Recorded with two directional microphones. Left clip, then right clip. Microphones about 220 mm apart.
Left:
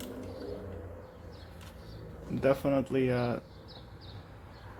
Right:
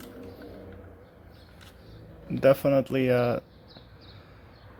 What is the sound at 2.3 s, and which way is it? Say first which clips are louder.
Speech: right 7 dB; 35° right (ahead or behind).